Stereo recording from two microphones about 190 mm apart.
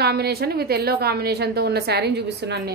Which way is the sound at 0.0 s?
55° right (ahead or behind).